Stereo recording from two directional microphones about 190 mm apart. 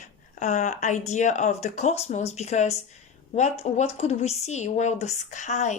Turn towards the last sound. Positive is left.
turn(degrees=40)  # may be behind; listen again after turning